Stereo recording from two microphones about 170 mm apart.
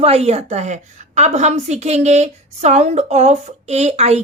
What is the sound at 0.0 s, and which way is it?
A woman's voice, 40° right (ahead or behind).